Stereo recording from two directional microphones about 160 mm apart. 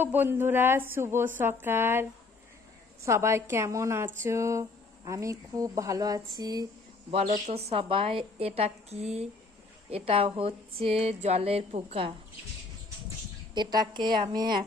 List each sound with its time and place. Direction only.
0.0 s speech: 10° right (ahead or behind)
7.1 s speech: 45° right (ahead or behind)
13.5 s speech: 25° right (ahead or behind)